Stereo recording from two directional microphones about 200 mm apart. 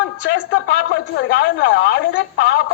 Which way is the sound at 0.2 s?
65° left (ahead or behind).